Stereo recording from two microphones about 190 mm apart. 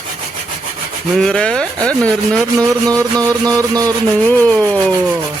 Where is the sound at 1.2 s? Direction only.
5° left (ahead or behind).